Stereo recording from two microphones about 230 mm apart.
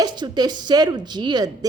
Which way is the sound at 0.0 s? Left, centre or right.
Centre.